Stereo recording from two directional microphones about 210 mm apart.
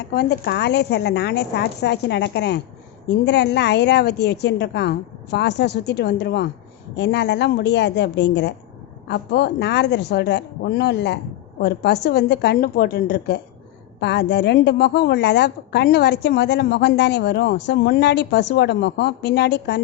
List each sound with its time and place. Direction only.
0.0 s a woman's voice: 50° left (ahead or behind)